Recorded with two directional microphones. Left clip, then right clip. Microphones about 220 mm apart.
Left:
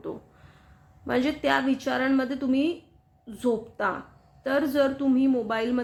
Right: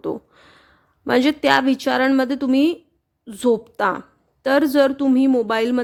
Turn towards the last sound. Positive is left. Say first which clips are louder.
# right 8 dB
turn(degrees=-50)  # may be behind; listen again after turning